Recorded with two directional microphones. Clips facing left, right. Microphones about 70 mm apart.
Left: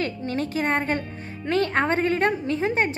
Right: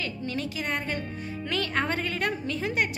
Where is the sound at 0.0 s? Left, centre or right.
Left.